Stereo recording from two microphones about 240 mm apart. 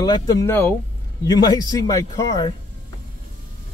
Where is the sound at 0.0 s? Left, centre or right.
Centre.